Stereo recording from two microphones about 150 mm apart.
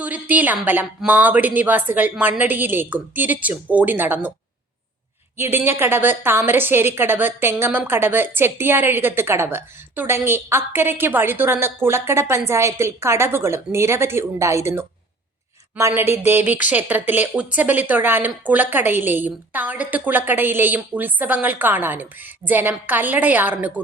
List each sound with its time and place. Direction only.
0.0 s speech: 10° right (ahead or behind)
5.4 s speech: 15° right (ahead or behind)
16.0 s speech: 15° right (ahead or behind)